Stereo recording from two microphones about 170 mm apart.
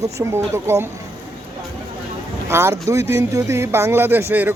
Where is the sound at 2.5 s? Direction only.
15° right (ahead or behind).